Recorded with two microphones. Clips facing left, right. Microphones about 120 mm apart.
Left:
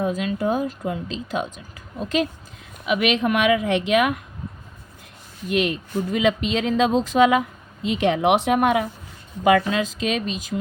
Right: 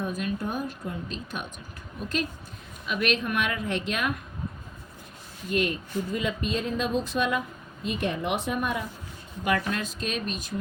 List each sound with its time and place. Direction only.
0.0 s speech: 90° left
5.5 s speech: 90° left